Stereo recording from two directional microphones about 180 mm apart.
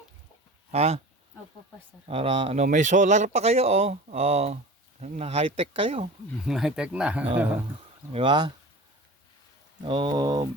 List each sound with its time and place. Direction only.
0.7 s speech: 35° right (ahead or behind)
2.0 s speech: 30° right (ahead or behind)
2.6 s speech: 45° right (ahead or behind)
6.4 s speech: 5° right (ahead or behind)
8.1 s speech: 25° right (ahead or behind)
9.8 s speech: 30° right (ahead or behind)